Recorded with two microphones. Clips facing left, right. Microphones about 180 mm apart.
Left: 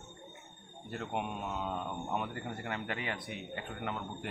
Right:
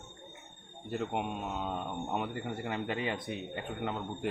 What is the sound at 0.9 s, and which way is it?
Speech, 20° right (ahead or behind).